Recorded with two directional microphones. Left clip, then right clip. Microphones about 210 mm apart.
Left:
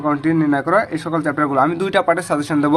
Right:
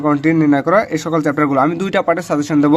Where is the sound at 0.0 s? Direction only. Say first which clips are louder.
Right 3 dB; 50° right (ahead or behind).